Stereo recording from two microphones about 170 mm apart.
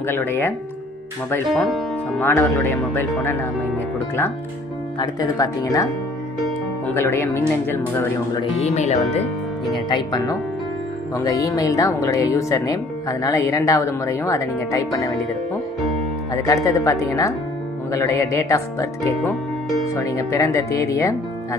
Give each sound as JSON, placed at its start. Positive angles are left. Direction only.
{"t": 0.0, "sound": "speech", "side_deg": 15}
{"t": 1.5, "sound": "speech", "side_deg": 0}
{"t": 2.1, "sound": "speech", "side_deg": 15}
{"t": 4.9, "sound": "speech", "side_deg": 25}
{"t": 7.0, "sound": "speech", "side_deg": 15}
{"t": 8.4, "sound": "speech", "side_deg": 40}
{"t": 9.8, "sound": "speech", "side_deg": 25}
{"t": 16.4, "sound": "speech", "side_deg": 20}